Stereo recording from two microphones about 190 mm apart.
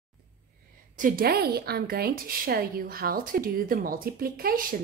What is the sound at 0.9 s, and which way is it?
A woman's voice, 45° right (ahead or behind).